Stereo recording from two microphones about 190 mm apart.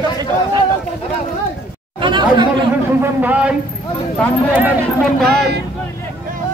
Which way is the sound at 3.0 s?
10° right (ahead or behind).